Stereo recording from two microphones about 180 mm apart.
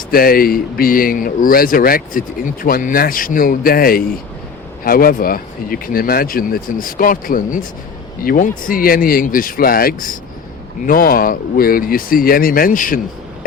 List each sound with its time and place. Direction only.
0.1 s speech: 55° left (ahead or behind)